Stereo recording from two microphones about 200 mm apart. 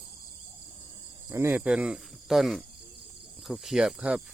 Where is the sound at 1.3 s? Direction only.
10° right (ahead or behind).